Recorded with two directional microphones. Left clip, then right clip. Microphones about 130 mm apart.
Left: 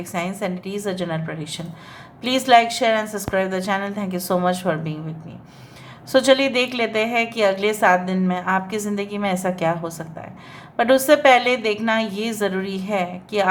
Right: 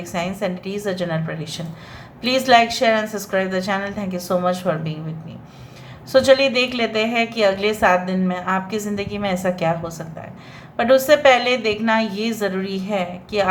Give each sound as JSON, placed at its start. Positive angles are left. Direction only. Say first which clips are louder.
{"t": 0.0, "sound": "a woman's voice", "louder": "right 2 dB", "side_deg": 25}
{"t": 6.1, "sound": "a woman's voice", "louder": "right 2 dB", "side_deg": 30}